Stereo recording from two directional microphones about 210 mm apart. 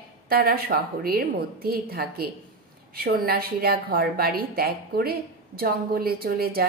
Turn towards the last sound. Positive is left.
turn(degrees=-45)  # may be behind; listen again after turning